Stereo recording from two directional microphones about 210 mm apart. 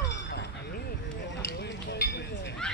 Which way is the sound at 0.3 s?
50° left (ahead or behind).